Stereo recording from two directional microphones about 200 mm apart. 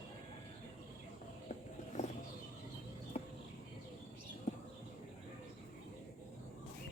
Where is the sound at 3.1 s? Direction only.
30° left (ahead or behind).